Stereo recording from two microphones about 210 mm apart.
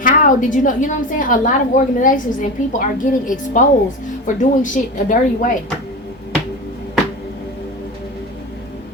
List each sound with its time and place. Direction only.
0.0 s a woman's voice: 40° left (ahead or behind)